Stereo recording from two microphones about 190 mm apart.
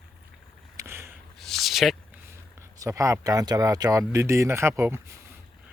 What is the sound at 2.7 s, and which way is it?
Speech, 15° right (ahead or behind).